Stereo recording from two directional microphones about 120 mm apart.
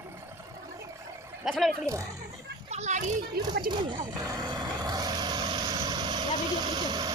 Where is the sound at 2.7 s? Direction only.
75° right (ahead or behind).